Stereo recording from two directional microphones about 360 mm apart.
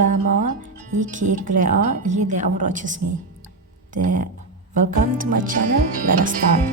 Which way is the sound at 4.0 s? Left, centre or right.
Right.